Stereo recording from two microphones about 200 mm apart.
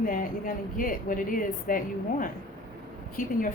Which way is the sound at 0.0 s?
45° left (ahead or behind).